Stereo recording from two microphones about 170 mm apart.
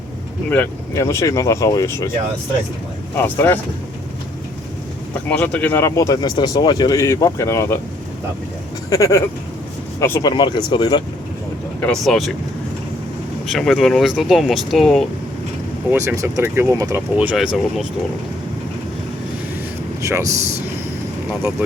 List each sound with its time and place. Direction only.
0.5 s speech: 15° left (ahead or behind)
3.2 s speech: 10° left (ahead or behind)
5.3 s speech: 10° left (ahead or behind)
8.9 s speech: 20° left (ahead or behind)
11.8 s speech: centre (ahead or behind)
13.5 s speech: centre (ahead or behind)
15.9 s speech: 15° right (ahead or behind)
17.2 s speech: 5° right (ahead or behind)
20.0 s speech: 15° right (ahead or behind)